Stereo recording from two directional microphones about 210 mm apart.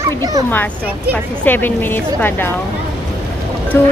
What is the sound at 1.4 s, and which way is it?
Speech, 10° left (ahead or behind).